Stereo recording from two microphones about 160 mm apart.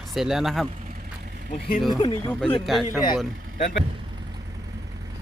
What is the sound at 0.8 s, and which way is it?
Vehicle, 65° right (ahead or behind).